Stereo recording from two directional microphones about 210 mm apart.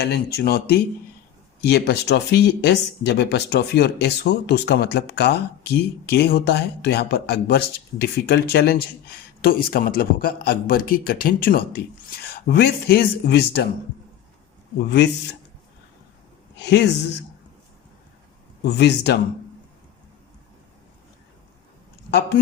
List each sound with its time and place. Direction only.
0.0 s speech: 50° left (ahead or behind)
14.8 s a woman's voice: 55° left (ahead or behind)
16.6 s a woman's voice: 55° left (ahead or behind)
18.6 s speech: 55° left (ahead or behind)